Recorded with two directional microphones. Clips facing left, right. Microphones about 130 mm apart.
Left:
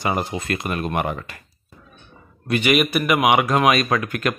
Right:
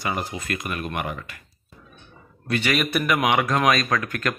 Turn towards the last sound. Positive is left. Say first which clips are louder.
# left 3 dB
turn(degrees=15)  # may be behind; listen again after turning